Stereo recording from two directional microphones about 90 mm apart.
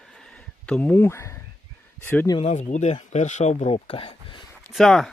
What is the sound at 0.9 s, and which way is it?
Speech, 30° left (ahead or behind).